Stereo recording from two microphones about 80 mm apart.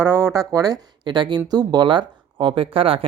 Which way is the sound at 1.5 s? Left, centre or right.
Right.